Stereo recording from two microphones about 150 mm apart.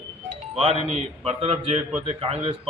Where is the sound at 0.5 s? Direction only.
40° right (ahead or behind).